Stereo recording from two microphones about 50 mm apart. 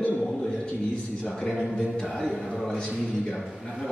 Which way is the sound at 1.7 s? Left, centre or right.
Centre.